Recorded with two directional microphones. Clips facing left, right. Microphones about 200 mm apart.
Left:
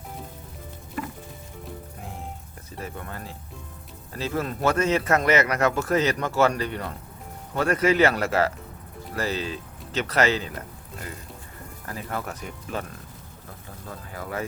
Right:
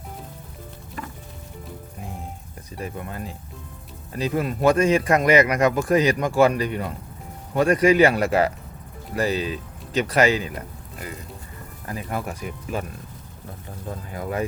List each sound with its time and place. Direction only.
2.8 s a man's voice: 15° right (ahead or behind)
11.9 s a man's voice: 15° right (ahead or behind)
14.1 s speech: 20° right (ahead or behind)